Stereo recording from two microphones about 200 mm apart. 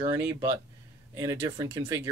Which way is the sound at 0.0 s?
15° right (ahead or behind).